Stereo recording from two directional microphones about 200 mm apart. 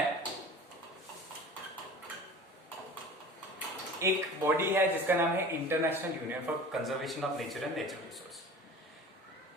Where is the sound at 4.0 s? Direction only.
10° right (ahead or behind).